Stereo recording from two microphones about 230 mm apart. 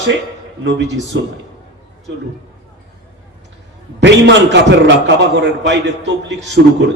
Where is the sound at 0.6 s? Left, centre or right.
Right.